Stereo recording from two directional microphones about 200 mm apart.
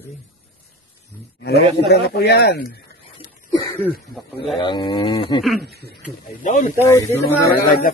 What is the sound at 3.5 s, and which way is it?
Cough, 20° left (ahead or behind).